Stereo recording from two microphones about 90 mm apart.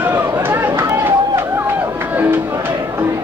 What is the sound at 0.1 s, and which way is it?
Run, 25° right (ahead or behind).